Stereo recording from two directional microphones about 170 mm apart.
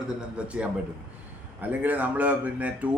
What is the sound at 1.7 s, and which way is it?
A man's voice, 10° right (ahead or behind).